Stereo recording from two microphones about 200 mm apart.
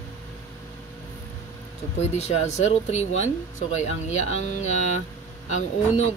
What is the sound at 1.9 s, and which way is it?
Speech, 35° left (ahead or behind).